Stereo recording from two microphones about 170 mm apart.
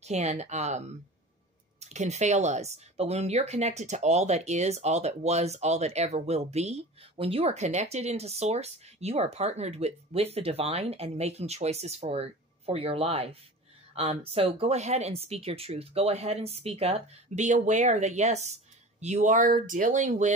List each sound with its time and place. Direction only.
0.0 s speech: 40° right (ahead or behind)